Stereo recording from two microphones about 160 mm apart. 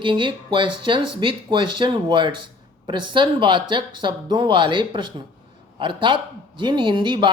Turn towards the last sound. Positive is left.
turn(degrees=-30)  # may be behind; listen again after turning